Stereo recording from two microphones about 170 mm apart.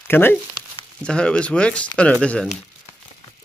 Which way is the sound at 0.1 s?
10° left (ahead or behind).